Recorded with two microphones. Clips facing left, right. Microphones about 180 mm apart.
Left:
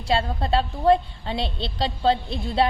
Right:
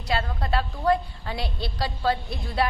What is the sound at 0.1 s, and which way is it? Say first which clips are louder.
A woman's voice: left 4 dB; 25° left (ahead or behind).